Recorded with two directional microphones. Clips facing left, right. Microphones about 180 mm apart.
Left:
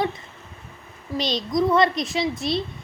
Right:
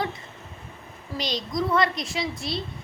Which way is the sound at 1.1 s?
20° left (ahead or behind).